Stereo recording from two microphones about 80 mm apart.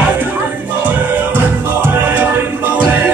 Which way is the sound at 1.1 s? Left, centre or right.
Right.